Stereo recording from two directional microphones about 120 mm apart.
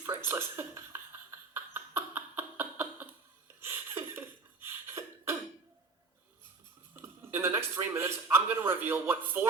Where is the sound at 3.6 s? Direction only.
20° right (ahead or behind).